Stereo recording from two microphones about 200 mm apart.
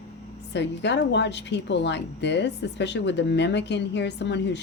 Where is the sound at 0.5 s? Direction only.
60° left (ahead or behind).